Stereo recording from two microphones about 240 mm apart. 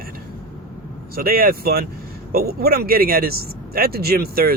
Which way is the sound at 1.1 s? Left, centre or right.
Right.